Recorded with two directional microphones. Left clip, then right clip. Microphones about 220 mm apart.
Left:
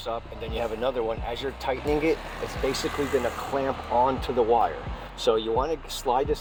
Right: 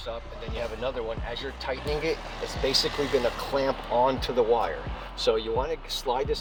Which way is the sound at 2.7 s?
55° left (ahead or behind).